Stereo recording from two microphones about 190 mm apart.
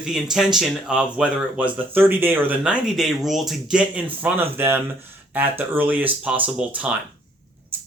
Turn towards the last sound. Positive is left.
turn(degrees=-5)  # may be behind; listen again after turning